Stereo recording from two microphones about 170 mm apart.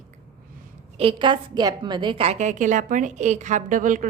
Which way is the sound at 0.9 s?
30° right (ahead or behind).